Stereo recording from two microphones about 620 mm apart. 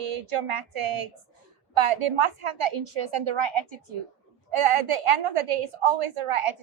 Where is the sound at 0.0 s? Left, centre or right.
Right.